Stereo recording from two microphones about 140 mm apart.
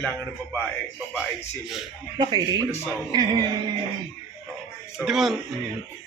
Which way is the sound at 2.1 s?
30° right (ahead or behind).